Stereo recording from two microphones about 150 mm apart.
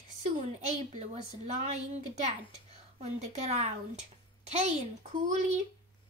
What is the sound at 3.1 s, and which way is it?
A woman's voice, 50° right (ahead or behind).